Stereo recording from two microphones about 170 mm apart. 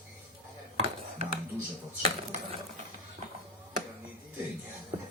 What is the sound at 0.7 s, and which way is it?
Dishes, 40° right (ahead or behind).